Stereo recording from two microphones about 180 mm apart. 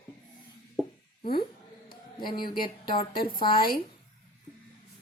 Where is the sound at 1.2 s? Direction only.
55° left (ahead or behind).